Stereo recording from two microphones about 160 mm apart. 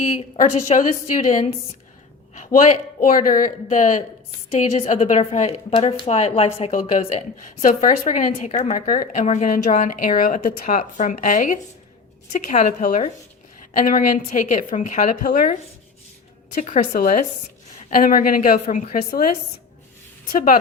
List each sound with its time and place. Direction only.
0.3 s a woman's voice: 50° left (ahead or behind)
16.6 s a woman's voice: 55° left (ahead or behind)
20.3 s a woman's voice: 60° left (ahead or behind)